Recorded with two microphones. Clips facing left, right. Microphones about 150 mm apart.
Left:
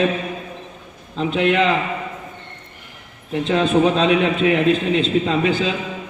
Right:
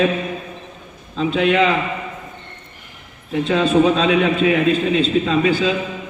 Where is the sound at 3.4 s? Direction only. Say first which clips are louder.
Right 1 dB; 20° left (ahead or behind).